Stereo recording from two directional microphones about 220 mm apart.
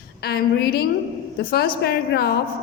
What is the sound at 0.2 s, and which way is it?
A woman's voice, 45° left (ahead or behind).